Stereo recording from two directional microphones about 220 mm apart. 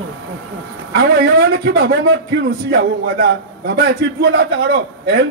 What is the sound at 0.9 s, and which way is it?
A man's voice, 45° right (ahead or behind).